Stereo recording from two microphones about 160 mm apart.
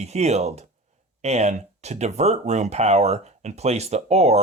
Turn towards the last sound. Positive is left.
turn(degrees=-45)  # may be behind; listen again after turning